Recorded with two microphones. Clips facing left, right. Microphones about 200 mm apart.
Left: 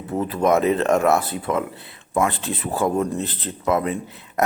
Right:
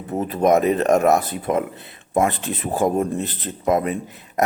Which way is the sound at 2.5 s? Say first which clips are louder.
Right 2 dB; 20° right (ahead or behind).